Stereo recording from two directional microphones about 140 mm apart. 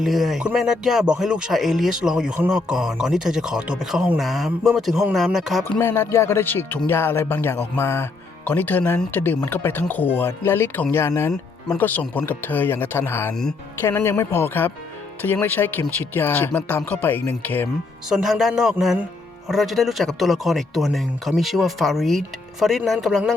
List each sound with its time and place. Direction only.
0.0 s speech: centre (ahead or behind)
5.6 s speech: 10° left (ahead or behind)
18.1 s speech: 5° right (ahead or behind)